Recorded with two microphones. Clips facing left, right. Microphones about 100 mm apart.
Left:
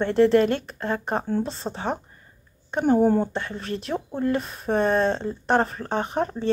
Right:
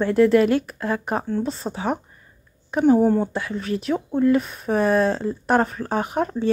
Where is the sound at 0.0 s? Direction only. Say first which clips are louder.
Right 2 dB; 5° right (ahead or behind).